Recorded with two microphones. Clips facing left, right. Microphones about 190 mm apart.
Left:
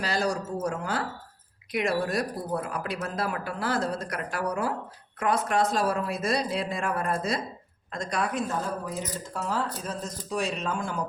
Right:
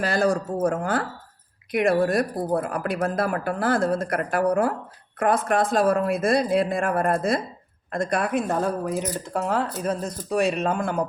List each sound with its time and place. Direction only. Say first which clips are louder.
0.0 s speech: right 6 dB; 55° right (ahead or behind)